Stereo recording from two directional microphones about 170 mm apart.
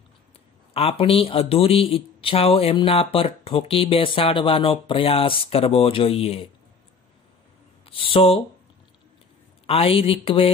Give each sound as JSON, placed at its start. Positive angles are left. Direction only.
{"t": 0.7, "sound": "a man's voice", "side_deg": 35}
{"t": 7.8, "sound": "speech", "side_deg": 30}
{"t": 9.7, "sound": "a man's voice", "side_deg": 35}